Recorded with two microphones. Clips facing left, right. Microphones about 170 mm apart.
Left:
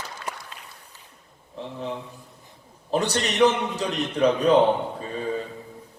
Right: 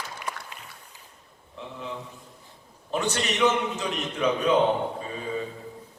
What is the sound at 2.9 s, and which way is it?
A man's voice, 35° left (ahead or behind).